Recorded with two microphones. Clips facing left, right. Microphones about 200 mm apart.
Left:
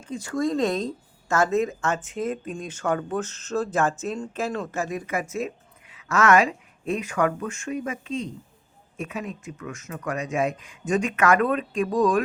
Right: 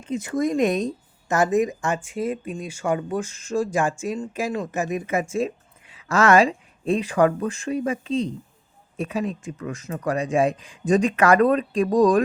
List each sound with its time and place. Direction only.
0.0 s speech: 20° right (ahead or behind); by 12.2 s 35° right (ahead or behind)